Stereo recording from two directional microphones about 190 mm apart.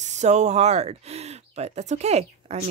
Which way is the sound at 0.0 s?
40° right (ahead or behind).